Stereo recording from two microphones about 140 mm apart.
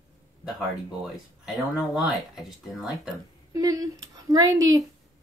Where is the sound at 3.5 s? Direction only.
25° right (ahead or behind).